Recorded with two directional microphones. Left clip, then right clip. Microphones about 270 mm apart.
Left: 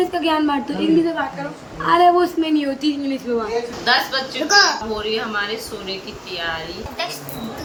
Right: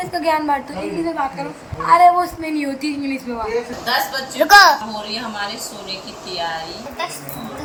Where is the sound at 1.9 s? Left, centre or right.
Centre.